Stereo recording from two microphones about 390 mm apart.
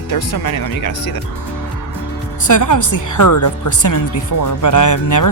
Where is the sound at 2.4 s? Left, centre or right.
Left.